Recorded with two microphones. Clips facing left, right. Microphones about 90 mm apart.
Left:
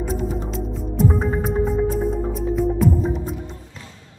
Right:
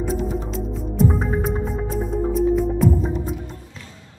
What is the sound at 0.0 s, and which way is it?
Music, centre (ahead or behind).